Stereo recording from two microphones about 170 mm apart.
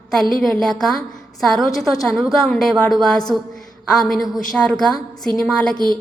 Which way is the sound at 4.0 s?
Centre (ahead or behind).